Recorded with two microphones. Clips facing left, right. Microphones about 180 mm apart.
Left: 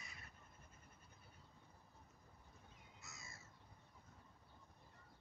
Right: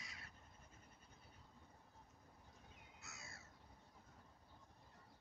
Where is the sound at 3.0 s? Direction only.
65° right (ahead or behind).